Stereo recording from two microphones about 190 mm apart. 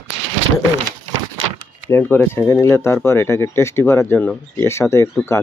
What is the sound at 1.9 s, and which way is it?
Speech, 10° left (ahead or behind).